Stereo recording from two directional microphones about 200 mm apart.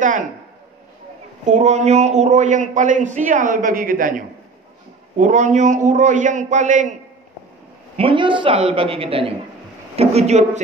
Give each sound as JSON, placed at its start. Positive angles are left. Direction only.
{"t": 1.5, "sound": "a man's voice", "side_deg": -35}
{"t": 8.0, "sound": "a man's voice", "side_deg": -25}